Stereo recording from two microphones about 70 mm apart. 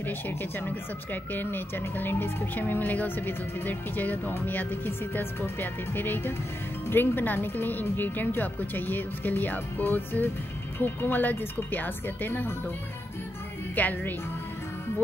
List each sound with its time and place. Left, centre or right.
1.3 s speech: left
13.7 s speech: left